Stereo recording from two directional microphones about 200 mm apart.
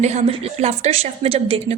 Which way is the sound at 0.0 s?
35° right (ahead or behind).